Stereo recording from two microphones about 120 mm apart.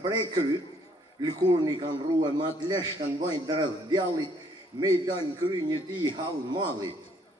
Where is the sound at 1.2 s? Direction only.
35° right (ahead or behind).